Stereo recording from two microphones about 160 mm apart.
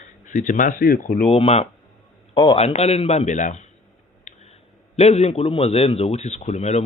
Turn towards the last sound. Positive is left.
turn(degrees=45)  # may be behind; listen again after turning